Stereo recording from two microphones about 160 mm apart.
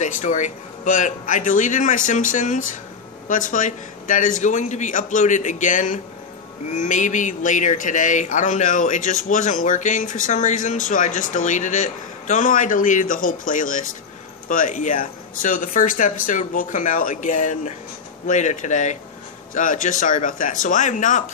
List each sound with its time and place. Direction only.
0.0 s speech: 50° left (ahead or behind)